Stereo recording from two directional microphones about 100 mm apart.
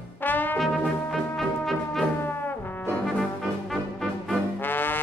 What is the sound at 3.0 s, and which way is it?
Brass instrument, centre (ahead or behind).